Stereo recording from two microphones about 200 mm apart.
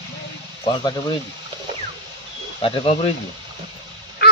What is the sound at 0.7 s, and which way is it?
Speech, 20° left (ahead or behind).